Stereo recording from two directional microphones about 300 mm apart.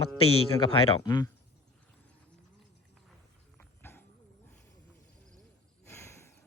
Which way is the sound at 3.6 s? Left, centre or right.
Centre.